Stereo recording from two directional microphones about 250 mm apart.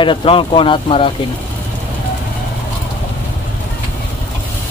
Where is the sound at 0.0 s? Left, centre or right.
Centre.